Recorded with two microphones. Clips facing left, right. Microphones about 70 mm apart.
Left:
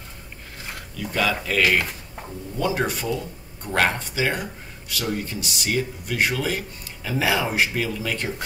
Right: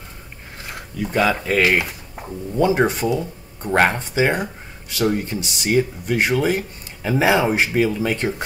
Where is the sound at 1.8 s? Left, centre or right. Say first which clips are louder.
Right 2 dB; centre.